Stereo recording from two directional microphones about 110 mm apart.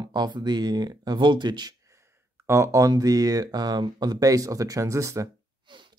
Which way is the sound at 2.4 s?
25° right (ahead or behind).